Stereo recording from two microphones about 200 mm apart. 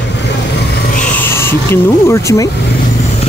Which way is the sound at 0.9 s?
5° left (ahead or behind).